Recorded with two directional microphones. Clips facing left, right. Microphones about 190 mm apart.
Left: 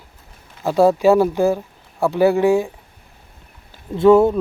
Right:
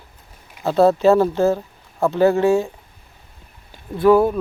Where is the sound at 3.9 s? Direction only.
25° left (ahead or behind).